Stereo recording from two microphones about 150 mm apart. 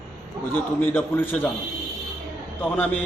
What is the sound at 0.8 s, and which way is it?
Speech, 15° left (ahead or behind).